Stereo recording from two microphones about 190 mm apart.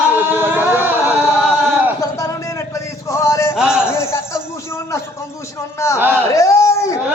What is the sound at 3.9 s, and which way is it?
Speech, 15° left (ahead or behind).